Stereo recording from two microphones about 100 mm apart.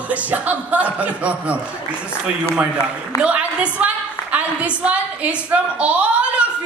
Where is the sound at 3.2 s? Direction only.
10° right (ahead or behind).